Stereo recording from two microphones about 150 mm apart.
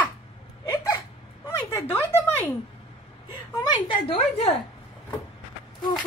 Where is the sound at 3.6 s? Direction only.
35° left (ahead or behind).